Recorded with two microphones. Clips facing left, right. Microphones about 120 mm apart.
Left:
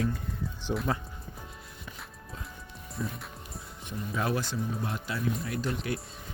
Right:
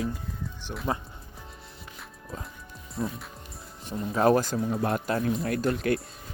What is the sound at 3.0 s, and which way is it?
Speech, 35° right (ahead or behind).